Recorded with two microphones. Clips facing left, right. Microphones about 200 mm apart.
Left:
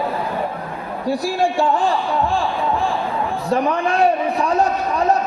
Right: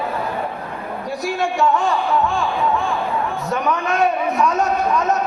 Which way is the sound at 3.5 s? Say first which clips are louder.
Left 4 dB; 30° left (ahead or behind).